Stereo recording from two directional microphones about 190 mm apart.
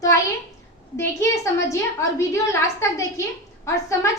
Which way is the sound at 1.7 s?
15° left (ahead or behind).